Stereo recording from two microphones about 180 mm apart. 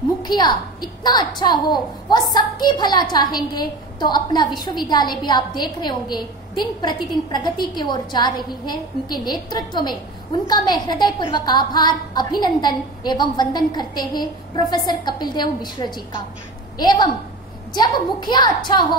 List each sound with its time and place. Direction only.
0.2 s a woman's voice: 25° left (ahead or behind)